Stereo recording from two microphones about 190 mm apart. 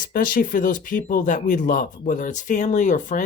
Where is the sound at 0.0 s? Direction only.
50° left (ahead or behind).